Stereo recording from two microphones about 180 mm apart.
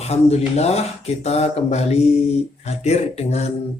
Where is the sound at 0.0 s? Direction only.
35° left (ahead or behind).